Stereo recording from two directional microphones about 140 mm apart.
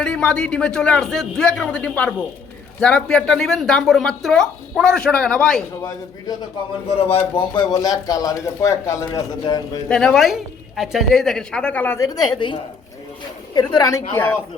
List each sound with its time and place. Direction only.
0.0 s a man's voice: 5° left (ahead or behind)
7.1 s a man's voice: 45° left (ahead or behind)
7.5 s speech: 30° left (ahead or behind)
9.9 s speech: 5° left (ahead or behind)
11.9 s a woman's voice: 25° left (ahead or behind)
14.1 s a man's voice: 15° left (ahead or behind)